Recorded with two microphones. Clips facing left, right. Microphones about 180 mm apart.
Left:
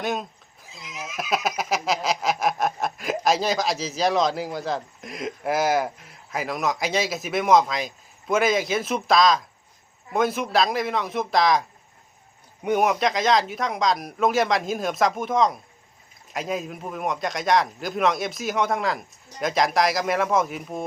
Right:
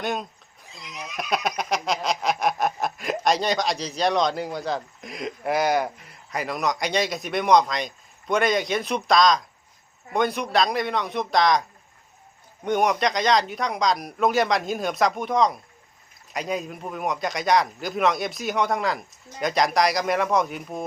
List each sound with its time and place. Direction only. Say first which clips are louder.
0.0 s speech: left 1 dB; centre (ahead or behind)
12.6 s speech: left 1 dB; 5° left (ahead or behind)